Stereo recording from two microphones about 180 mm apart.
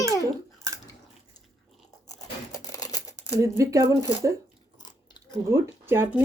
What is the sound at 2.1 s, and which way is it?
Tearing, 20° left (ahead or behind).